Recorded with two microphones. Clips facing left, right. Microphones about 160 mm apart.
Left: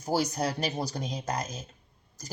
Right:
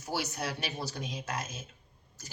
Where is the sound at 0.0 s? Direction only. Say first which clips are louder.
Left 7 dB; 40° left (ahead or behind).